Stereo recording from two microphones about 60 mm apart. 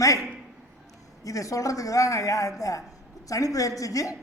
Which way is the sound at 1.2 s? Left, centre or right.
Left.